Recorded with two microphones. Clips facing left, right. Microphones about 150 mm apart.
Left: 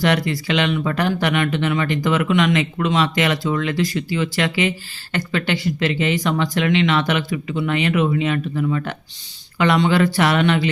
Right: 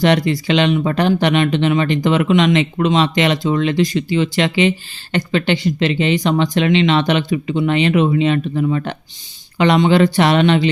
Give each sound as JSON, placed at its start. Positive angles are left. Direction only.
{"t": 0.0, "sound": "speech", "side_deg": -20}